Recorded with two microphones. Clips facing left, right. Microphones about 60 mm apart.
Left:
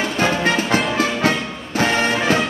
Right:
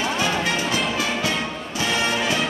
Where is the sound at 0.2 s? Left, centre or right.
Left.